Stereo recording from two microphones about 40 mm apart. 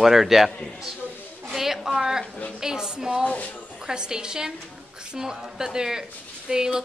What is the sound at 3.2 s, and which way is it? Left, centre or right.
Speech, left.